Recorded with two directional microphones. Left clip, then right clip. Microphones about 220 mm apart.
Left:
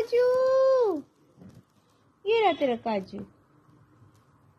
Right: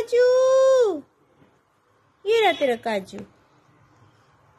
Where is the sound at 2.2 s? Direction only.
35° right (ahead or behind).